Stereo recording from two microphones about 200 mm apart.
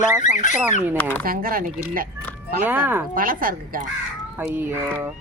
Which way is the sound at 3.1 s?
45° right (ahead or behind).